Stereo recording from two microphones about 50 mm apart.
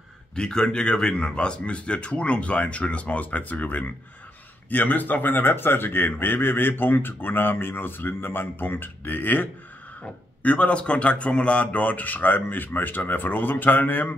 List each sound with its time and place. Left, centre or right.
0.4 s speech: centre; by 9.5 s left
10.4 s speech: left